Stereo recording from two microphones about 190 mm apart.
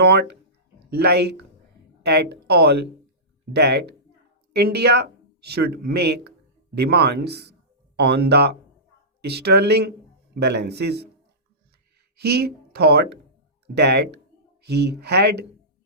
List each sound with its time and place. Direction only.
0.0 s a sound: 60° right (ahead or behind)
0.9 s speech: 60° right (ahead or behind)
12.1 s speech: 60° right (ahead or behind)